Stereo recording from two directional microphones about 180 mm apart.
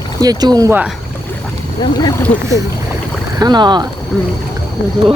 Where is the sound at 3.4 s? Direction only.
25° right (ahead or behind).